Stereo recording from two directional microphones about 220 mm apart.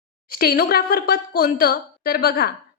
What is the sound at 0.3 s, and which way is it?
A woman's voice, 40° left (ahead or behind).